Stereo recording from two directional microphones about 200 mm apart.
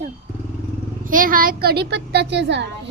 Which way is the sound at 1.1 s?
45° right (ahead or behind).